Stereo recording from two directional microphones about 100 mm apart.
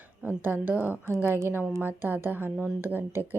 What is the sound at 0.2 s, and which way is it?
Speech, 15° right (ahead or behind).